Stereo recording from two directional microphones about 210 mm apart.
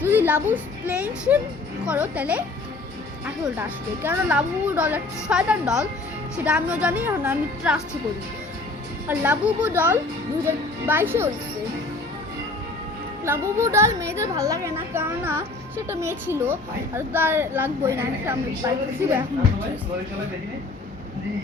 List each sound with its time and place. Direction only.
0.0 s a woman's voice: 10° right (ahead or behind)
3.6 s a woman's voice: 10° right (ahead or behind)
9.0 s a woman's voice: 10° right (ahead or behind)
13.2 s a woman's voice: 10° right (ahead or behind)